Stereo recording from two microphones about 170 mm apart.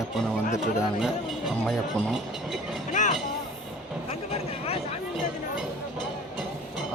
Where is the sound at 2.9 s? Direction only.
45° left (ahead or behind).